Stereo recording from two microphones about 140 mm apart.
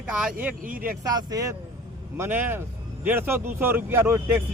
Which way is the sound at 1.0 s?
25° right (ahead or behind).